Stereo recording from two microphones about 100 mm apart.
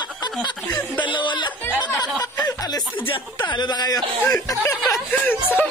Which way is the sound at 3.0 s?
60° left (ahead or behind).